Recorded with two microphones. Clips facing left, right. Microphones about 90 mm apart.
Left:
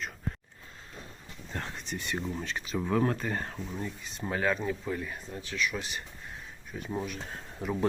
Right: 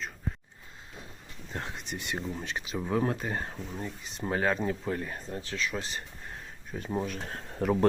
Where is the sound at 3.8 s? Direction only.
20° right (ahead or behind).